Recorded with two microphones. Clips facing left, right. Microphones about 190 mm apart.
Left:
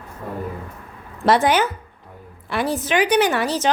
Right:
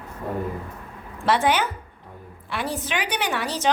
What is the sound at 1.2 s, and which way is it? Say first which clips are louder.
A woman's voice: left 4 dB; 40° left (ahead or behind).